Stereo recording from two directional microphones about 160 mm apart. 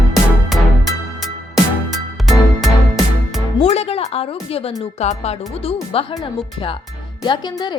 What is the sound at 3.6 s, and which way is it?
Music, 45° left (ahead or behind).